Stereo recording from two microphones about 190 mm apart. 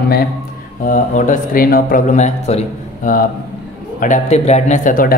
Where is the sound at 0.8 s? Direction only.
40° left (ahead or behind).